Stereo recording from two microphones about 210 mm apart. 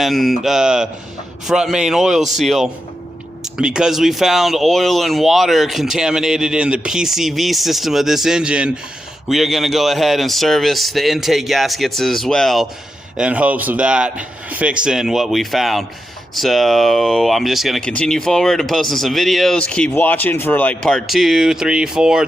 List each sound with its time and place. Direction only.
0.0 s speech: centre (ahead or behind)